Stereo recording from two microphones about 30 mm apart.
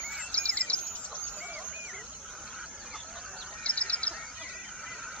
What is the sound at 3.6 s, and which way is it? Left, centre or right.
Bird, left.